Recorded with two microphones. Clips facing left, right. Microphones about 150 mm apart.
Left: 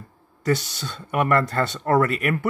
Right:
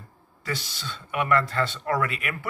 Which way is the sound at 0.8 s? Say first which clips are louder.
Left 4 dB; 45° left (ahead or behind).